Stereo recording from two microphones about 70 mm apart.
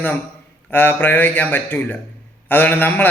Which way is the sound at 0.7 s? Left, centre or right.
Left.